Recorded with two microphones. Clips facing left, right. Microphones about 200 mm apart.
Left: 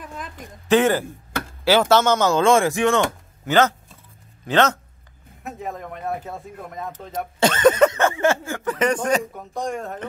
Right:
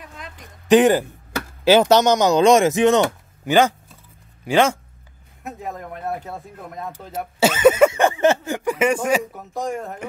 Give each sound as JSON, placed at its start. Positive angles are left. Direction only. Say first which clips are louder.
{"t": 0.7, "sound": "speech", "louder": "right 4 dB", "side_deg": -15}